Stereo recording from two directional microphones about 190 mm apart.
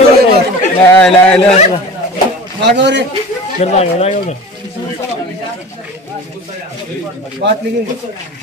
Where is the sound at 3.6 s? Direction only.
35° left (ahead or behind).